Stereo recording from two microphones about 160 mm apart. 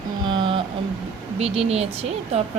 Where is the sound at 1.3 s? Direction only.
40° right (ahead or behind).